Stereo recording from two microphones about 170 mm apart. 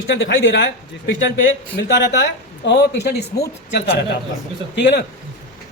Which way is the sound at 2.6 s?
85° left.